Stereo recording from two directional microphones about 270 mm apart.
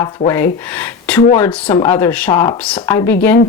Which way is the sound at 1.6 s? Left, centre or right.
Centre.